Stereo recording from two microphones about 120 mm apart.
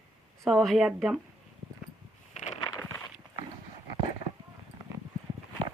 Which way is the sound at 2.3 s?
70° left (ahead or behind).